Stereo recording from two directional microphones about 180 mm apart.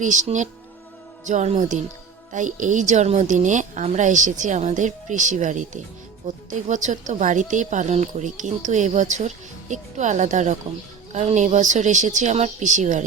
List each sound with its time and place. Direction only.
0.0 s speech: 45° right (ahead or behind)